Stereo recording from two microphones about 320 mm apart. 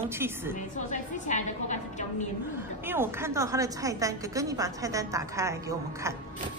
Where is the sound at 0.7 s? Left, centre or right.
Left.